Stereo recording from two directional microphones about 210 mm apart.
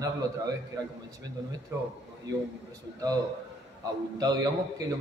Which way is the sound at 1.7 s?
15° right (ahead or behind).